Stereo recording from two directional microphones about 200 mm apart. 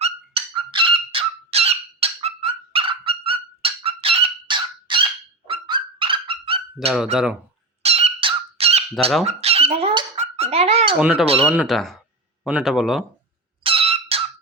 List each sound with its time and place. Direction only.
0.0 s fowl: 25° right (ahead or behind)
5.5 s dog: 25° right (ahead or behind)
7.8 s a sound: 30° right (ahead or behind)
9.2 s speech: 30° right (ahead or behind)
10.9 s speech: 5° right (ahead or behind)
13.6 s a sound: 25° right (ahead or behind)